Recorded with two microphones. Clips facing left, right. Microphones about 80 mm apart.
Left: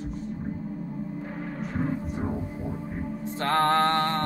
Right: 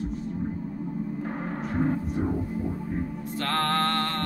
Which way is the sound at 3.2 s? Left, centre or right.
Left.